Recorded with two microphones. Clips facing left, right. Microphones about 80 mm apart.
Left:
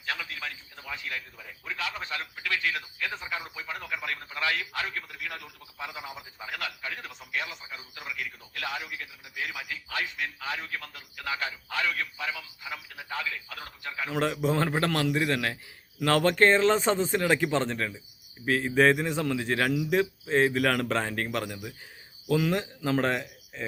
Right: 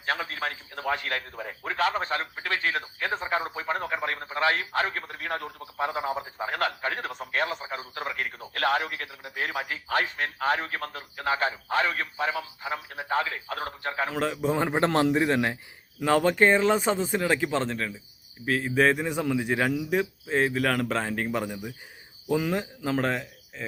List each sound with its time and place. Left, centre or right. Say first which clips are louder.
0.0 s a man's voice: right 6 dB; right
14.1 s speech: left 3 dB; centre
14.5 s a man's voice: right 3 dB; centre
16.0 s a man's voice: right 1 dB; centre
19.7 s speech: left 1 dB; centre
21.3 s a man's voice: right 2 dB; centre